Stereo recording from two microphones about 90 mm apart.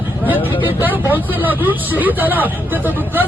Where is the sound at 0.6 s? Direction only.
20° right (ahead or behind).